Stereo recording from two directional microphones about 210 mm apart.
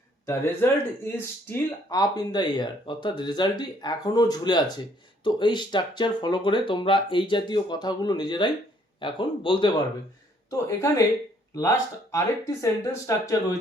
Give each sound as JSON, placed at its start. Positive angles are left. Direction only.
{"t": 0.3, "sound": "speech", "side_deg": 10}
{"t": 12.6, "sound": "speech", "side_deg": 15}